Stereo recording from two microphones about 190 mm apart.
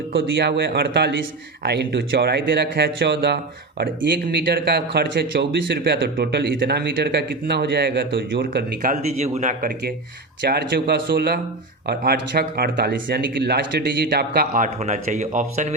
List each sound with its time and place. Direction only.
0.1 s speech: 65° right (ahead or behind)
8.9 s speech: 35° right (ahead or behind)
10.4 s speech: 60° right (ahead or behind)
14.8 s speech: 35° right (ahead or behind)